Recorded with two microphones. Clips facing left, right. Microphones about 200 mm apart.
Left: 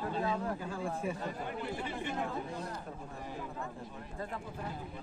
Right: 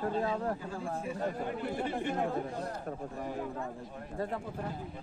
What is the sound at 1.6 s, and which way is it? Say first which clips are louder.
Speech: right 6 dB; 50° right (ahead or behind).